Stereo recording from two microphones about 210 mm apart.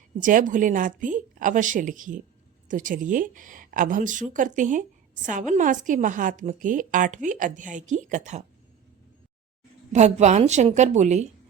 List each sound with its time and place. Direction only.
0.2 s speech: 40° right (ahead or behind)
9.9 s speech: 35° right (ahead or behind)